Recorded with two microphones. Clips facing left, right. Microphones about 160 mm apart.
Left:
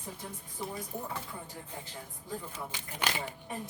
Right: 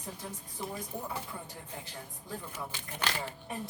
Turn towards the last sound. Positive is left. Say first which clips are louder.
# left 1 dB
turn(degrees=15)  # may be behind; listen again after turning